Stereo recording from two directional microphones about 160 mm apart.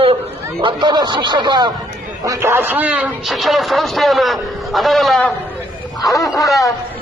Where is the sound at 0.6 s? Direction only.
30° right (ahead or behind).